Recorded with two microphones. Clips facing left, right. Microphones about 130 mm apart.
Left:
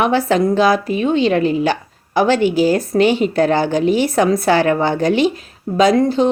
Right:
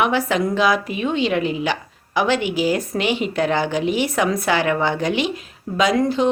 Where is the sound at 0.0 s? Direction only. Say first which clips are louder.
Left 4 dB; 35° left (ahead or behind).